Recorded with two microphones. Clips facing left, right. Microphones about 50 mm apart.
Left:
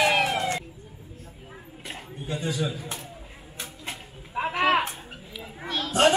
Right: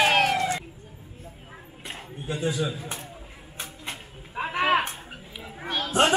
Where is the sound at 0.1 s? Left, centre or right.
Right.